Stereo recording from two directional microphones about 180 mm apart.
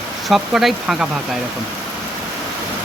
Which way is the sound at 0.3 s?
Centre (ahead or behind).